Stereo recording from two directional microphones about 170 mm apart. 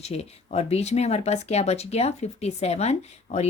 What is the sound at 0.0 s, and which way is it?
Speech, 40° left (ahead or behind).